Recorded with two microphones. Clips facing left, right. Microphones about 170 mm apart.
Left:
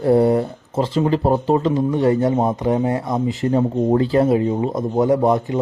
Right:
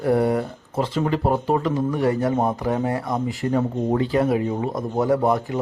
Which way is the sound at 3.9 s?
35° left (ahead or behind).